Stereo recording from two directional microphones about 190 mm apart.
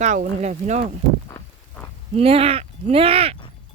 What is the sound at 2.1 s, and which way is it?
Speech, 30° right (ahead or behind).